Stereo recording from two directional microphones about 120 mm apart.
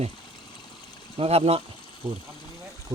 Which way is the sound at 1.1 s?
55° right (ahead or behind).